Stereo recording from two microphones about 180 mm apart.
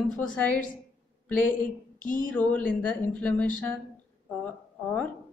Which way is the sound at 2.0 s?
50° left (ahead or behind).